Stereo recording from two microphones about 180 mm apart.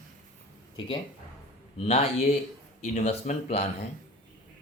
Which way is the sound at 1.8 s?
35° left (ahead or behind).